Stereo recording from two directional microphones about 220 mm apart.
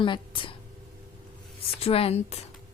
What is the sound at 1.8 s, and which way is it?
Speech, 25° left (ahead or behind).